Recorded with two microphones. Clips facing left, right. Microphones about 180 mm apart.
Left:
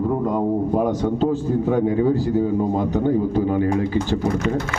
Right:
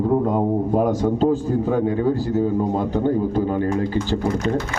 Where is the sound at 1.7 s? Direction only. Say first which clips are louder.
Left 2 dB; 15° left (ahead or behind).